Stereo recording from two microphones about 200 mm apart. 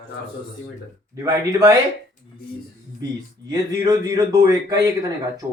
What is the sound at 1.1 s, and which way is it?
Speech, 15° right (ahead or behind).